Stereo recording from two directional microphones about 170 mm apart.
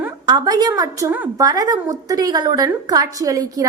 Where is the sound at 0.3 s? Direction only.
25° right (ahead or behind).